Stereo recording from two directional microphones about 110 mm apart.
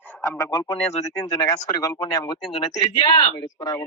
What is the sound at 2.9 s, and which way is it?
Speech, 45° left (ahead or behind).